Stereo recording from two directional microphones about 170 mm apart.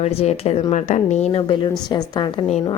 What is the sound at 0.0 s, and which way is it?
A woman's voice, 35° left (ahead or behind).